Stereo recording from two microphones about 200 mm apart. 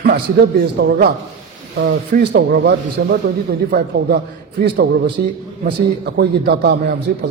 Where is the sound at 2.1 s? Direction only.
55° right (ahead or behind).